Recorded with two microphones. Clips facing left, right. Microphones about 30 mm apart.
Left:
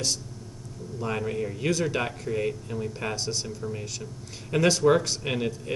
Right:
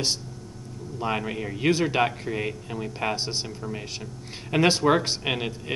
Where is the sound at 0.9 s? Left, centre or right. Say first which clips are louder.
Right 1 dB; right.